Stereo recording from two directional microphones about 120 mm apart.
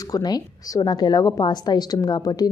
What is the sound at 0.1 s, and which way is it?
Speech, 35° left (ahead or behind).